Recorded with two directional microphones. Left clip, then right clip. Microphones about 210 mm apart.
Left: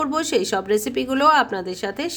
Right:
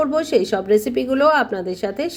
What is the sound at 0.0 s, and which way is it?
Speech, 15° left (ahead or behind).